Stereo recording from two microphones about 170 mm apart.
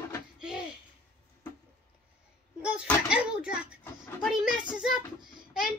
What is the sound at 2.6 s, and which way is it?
A child's voice, 5° right (ahead or behind).